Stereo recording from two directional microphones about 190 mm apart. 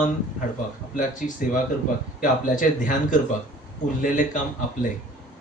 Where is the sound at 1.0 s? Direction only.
45° left (ahead or behind).